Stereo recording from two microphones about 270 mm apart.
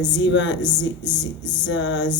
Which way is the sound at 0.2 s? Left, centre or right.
Left.